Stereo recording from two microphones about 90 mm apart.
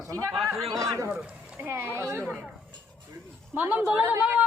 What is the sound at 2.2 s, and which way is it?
Speech, centre (ahead or behind).